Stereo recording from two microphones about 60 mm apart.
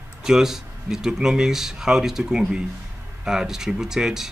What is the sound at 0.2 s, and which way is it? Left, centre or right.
Speech, centre.